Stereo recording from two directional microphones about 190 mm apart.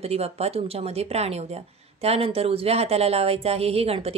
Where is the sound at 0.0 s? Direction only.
35° right (ahead or behind).